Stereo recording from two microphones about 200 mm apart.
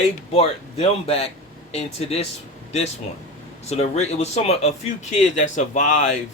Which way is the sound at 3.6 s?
30° left (ahead or behind).